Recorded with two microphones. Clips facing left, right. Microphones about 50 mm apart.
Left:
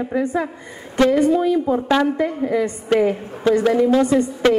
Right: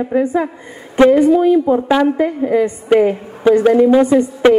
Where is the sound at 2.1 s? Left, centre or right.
Right.